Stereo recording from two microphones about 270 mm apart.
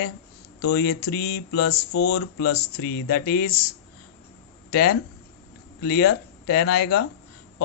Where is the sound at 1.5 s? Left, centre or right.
Left.